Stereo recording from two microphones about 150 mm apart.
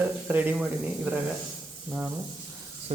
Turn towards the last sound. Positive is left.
turn(degrees=-45)  # may be behind; listen again after turning